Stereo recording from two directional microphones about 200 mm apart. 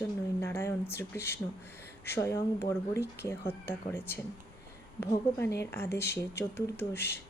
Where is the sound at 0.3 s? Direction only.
15° left (ahead or behind).